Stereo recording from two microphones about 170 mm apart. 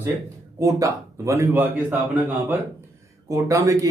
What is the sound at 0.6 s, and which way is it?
A man's voice, 20° right (ahead or behind).